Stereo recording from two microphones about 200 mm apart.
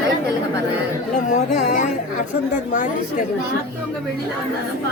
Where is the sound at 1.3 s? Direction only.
40° left (ahead or behind).